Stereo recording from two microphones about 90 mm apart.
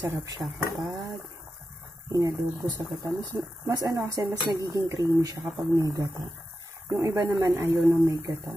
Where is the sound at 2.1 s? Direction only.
45° right (ahead or behind).